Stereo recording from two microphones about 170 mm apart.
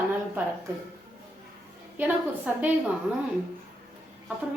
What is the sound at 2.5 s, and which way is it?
Speech, 10° right (ahead or behind).